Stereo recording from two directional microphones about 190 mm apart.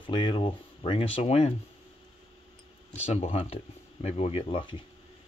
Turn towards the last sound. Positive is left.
turn(degrees=25)  # may be behind; listen again after turning